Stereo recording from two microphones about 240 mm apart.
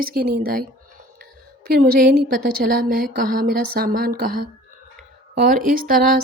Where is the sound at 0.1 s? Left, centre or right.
Right.